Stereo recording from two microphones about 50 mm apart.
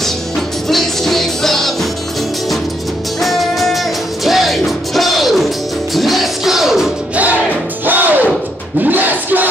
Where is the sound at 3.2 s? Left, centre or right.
Centre.